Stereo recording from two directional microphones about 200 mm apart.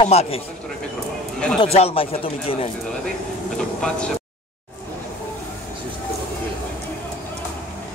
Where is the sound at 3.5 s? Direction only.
5° left (ahead or behind).